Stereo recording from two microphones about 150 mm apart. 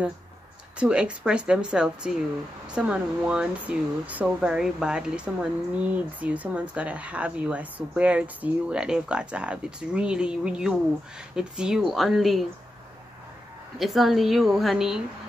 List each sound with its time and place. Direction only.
0.7 s a woman's voice: 5° right (ahead or behind)
13.7 s a woman's voice: centre (ahead or behind)